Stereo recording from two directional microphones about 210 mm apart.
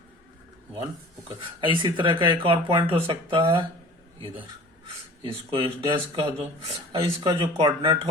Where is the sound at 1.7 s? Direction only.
25° right (ahead or behind).